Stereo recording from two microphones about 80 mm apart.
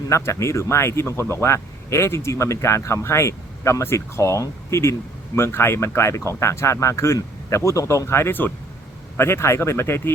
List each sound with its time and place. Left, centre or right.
0.1 s speech: left